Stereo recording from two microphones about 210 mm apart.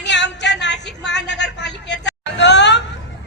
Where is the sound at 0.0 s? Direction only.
55° left (ahead or behind).